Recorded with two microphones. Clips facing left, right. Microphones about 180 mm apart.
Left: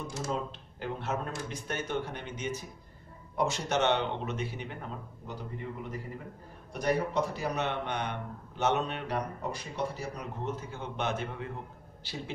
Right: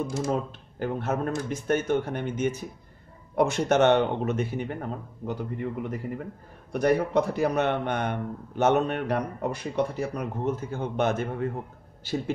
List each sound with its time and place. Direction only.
0.3 s a man's voice: 50° right (ahead or behind)